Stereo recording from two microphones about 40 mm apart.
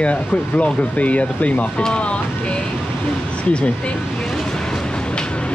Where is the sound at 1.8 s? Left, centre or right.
Left.